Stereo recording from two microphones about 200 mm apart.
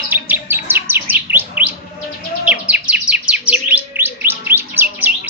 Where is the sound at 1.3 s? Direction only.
10° right (ahead or behind).